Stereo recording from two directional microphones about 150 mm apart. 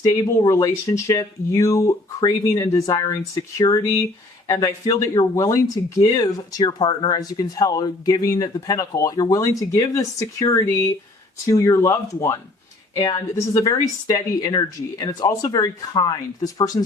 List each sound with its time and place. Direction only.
0.0 s speech: 20° left (ahead or behind)